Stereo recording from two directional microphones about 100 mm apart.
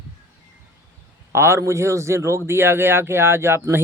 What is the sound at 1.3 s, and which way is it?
A man's voice, 25° right (ahead or behind).